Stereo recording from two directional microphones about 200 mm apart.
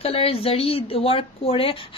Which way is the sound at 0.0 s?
30° left (ahead or behind).